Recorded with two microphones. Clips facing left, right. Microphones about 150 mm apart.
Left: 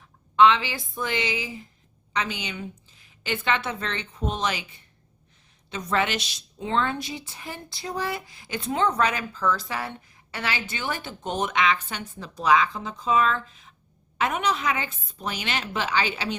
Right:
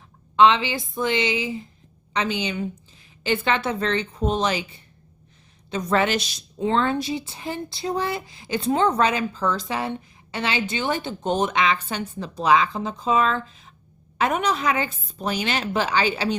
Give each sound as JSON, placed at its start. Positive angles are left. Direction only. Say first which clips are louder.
{"t": 0.3, "sound": "a woman's voice", "louder": "right 2 dB", "side_deg": -30}